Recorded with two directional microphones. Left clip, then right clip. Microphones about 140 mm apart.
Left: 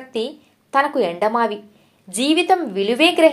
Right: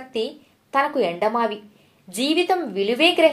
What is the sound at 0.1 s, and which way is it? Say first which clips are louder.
A woman's voice: left 2 dB; 35° left (ahead or behind).